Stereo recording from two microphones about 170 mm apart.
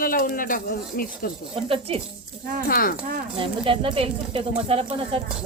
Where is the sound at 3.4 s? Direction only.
30° right (ahead or behind).